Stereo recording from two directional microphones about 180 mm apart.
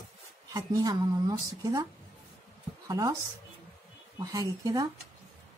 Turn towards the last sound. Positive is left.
turn(degrees=-20)  # may be behind; listen again after turning